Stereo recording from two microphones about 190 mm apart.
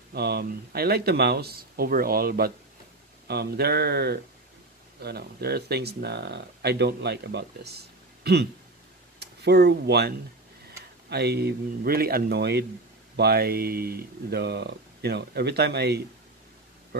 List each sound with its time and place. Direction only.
0.1 s speech: 55° right (ahead or behind)